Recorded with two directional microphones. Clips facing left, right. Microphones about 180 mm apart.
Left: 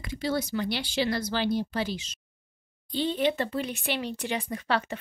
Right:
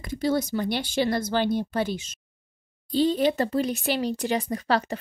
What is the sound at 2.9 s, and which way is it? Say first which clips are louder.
Speech: right 5 dB; 40° right (ahead or behind).